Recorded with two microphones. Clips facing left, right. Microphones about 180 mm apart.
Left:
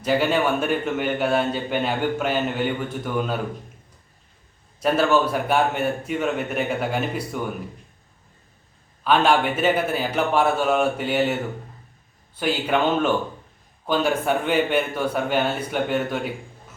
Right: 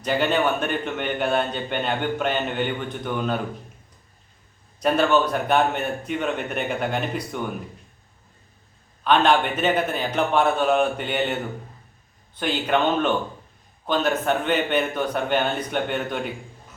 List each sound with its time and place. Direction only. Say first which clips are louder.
0.0 s a man's voice: left 1 dB; 5° left (ahead or behind)
4.8 s a man's voice: even; 5° left (ahead or behind)
9.0 s a man's voice: even; 5° left (ahead or behind)